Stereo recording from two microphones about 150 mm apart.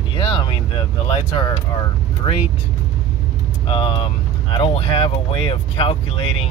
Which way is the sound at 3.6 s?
35° left (ahead or behind).